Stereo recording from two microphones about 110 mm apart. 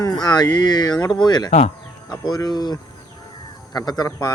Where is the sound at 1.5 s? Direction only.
85° left.